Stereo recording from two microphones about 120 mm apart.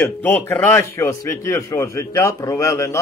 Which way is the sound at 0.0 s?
15° left (ahead or behind).